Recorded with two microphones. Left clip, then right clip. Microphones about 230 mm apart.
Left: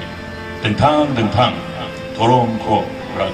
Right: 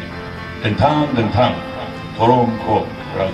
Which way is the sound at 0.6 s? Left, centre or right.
Right.